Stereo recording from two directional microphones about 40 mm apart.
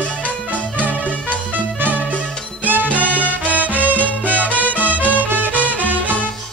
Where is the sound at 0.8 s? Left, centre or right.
Right.